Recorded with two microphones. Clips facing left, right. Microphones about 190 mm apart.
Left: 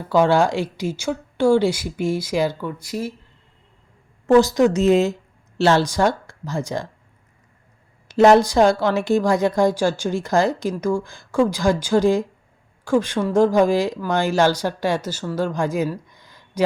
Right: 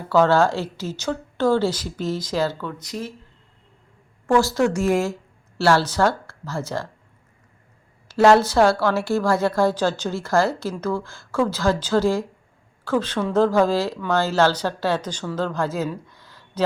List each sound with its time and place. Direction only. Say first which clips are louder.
0.1 s a woman's voice: left 1 dB; 15° left (ahead or behind)
4.3 s a woman's voice: left 4 dB; 15° left (ahead or behind)
8.0 s a woman's voice: left 2 dB; 20° left (ahead or behind)
16.0 s a sound: right 1 dB; 15° left (ahead or behind)